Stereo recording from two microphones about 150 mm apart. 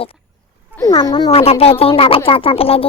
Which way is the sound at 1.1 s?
35° left (ahead or behind).